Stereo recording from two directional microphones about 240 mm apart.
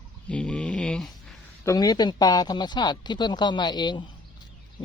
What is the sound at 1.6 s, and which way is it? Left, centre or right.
Speech, centre.